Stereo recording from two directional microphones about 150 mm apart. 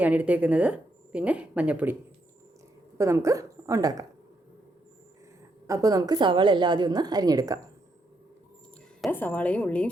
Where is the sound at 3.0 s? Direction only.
20° right (ahead or behind).